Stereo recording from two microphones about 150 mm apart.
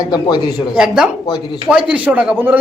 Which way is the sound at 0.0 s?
25° left (ahead or behind).